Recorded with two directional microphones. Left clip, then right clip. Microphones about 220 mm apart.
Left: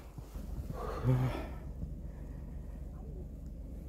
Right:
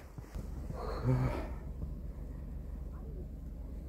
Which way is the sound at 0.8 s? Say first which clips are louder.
Even; 15° left (ahead or behind).